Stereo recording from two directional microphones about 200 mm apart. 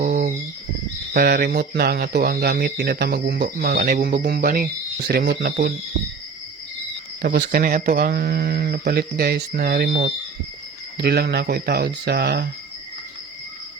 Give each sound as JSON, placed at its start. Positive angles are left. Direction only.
{"t": 0.0, "sound": "a sound", "side_deg": -45}
{"t": 1.1, "sound": "speech", "side_deg": -50}
{"t": 3.7, "sound": "speech", "side_deg": -45}
{"t": 7.2, "sound": "speech", "side_deg": -50}